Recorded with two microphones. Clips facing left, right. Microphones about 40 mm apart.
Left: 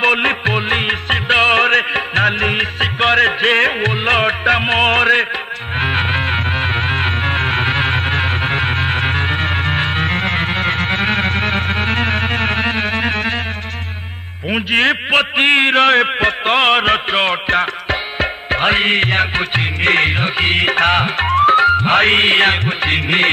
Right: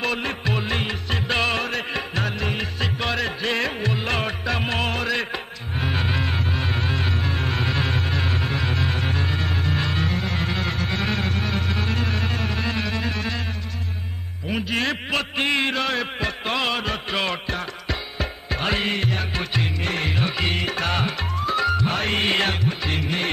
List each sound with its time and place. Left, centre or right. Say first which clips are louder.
0.0 s music: left 11 dB; left
14.5 s a man's voice: left 9 dB; left